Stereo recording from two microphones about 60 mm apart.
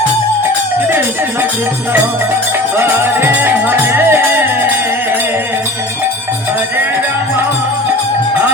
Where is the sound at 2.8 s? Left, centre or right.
Right.